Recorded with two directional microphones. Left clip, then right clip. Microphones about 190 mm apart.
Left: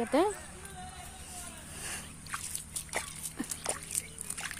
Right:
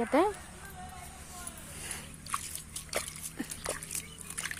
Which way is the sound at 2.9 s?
10° left (ahead or behind).